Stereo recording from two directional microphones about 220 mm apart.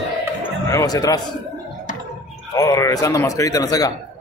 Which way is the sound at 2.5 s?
15° left (ahead or behind).